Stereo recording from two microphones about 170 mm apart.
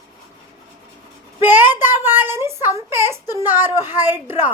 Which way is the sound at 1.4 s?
10° right (ahead or behind).